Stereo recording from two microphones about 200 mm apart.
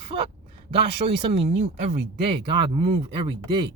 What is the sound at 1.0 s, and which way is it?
Speech, 30° right (ahead or behind).